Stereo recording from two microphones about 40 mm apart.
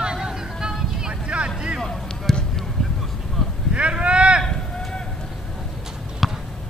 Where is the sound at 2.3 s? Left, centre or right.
Centre.